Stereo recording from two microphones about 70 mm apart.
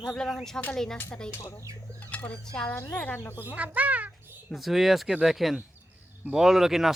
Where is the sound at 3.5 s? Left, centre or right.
Right.